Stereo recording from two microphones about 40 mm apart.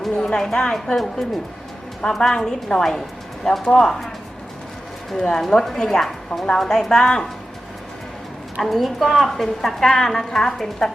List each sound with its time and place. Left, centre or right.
0.3 s a woman's voice: centre
2.0 s speech: centre
5.1 s speech: centre
8.6 s a woman's voice: centre